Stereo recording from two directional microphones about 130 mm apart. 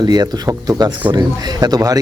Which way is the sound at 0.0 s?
30° right (ahead or behind).